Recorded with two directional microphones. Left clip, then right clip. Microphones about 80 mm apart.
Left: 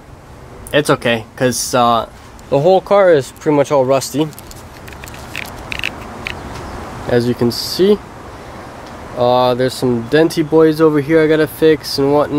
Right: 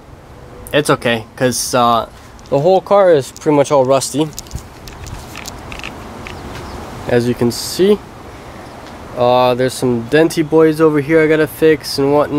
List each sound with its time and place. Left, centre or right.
0.7 s speech: centre
3.5 s speech: centre
5.3 s a sound: left
7.1 s speech: centre
9.1 s speech: centre